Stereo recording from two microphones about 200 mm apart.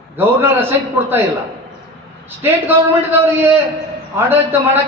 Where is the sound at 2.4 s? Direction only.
10° right (ahead or behind).